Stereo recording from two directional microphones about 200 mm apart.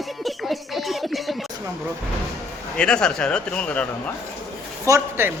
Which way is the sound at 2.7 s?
5° left (ahead or behind).